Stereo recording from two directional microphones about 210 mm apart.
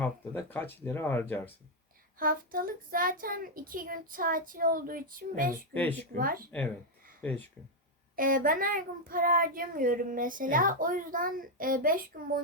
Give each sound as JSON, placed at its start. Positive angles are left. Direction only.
{"t": 0.0, "sound": "speech", "side_deg": 10}
{"t": 2.1, "sound": "speech", "side_deg": -40}
{"t": 7.2, "sound": "speech", "side_deg": 10}
{"t": 8.1, "sound": "speech", "side_deg": -40}